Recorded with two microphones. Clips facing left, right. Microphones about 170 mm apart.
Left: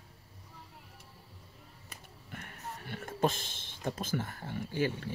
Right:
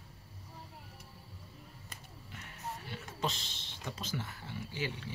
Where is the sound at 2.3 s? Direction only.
55° left (ahead or behind).